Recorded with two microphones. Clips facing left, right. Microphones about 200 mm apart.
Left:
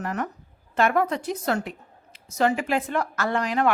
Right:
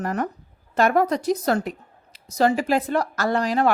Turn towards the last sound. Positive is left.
turn(degrees=-35)  # may be behind; listen again after turning